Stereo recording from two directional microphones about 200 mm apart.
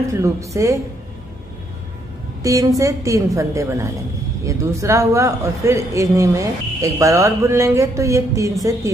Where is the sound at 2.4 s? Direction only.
15° right (ahead or behind).